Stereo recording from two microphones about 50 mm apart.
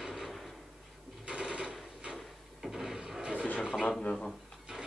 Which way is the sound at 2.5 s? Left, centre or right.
Centre.